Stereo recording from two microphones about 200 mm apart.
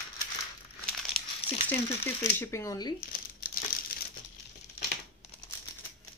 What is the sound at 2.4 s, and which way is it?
Speech, 15° left (ahead or behind).